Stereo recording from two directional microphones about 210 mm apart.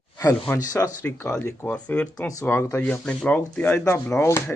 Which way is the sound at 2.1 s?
15° left (ahead or behind).